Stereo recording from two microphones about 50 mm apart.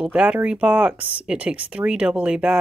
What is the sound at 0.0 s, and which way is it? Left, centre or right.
Speech, right.